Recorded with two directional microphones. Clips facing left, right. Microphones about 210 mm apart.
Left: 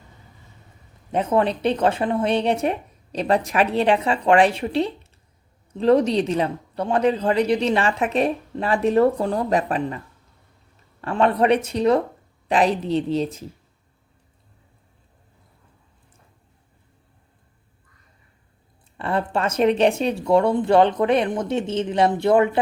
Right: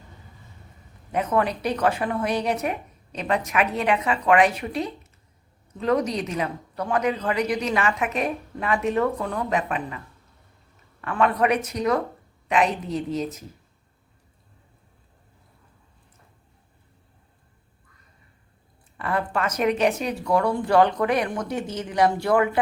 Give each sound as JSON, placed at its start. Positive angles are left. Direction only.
{"t": 1.1, "sound": "a woman's voice", "side_deg": 25}
{"t": 11.0, "sound": "a woman's voice", "side_deg": 30}
{"t": 18.9, "sound": "speech", "side_deg": 25}